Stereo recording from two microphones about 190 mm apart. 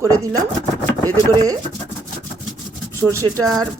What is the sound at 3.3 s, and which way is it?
Speech, 5° left (ahead or behind).